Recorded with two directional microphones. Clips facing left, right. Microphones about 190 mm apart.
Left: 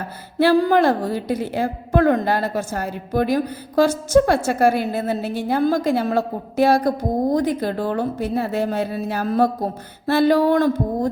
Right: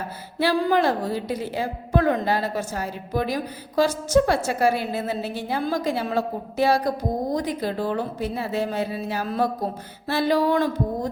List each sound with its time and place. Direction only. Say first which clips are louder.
0.3 s a woman's voice: left 5 dB; 50° left (ahead or behind)